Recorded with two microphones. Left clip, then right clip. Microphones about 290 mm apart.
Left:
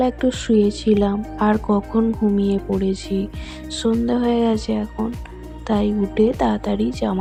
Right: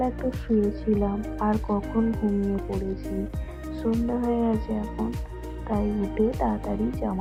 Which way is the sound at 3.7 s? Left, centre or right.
Left.